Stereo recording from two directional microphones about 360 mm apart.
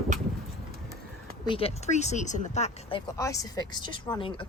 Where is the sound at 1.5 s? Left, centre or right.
Centre.